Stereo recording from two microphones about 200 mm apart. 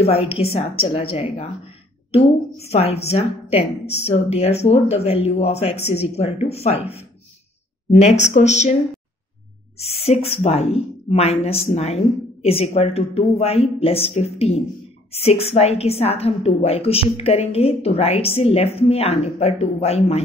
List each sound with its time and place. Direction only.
0.0 s a woman's voice: 30° left (ahead or behind)
7.9 s a woman's voice: 35° left (ahead or behind)
9.8 s a woman's voice: 30° left (ahead or behind)